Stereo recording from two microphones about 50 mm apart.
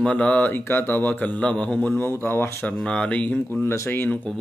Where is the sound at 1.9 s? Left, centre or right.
Left.